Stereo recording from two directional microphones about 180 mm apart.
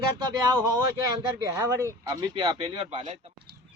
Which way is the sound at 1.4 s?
20° right (ahead or behind).